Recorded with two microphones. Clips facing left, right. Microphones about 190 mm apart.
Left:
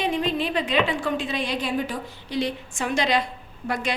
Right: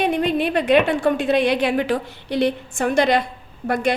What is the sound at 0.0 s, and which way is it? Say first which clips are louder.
A woman's voice: right 5 dB; 65° right (ahead or behind).